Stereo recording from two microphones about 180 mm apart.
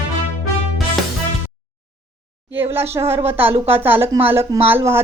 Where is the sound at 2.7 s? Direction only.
15° right (ahead or behind).